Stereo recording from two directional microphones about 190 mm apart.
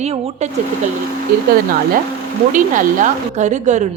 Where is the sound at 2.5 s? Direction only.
45° right (ahead or behind).